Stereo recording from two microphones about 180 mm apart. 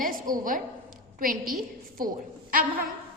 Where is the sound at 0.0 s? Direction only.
50° right (ahead or behind).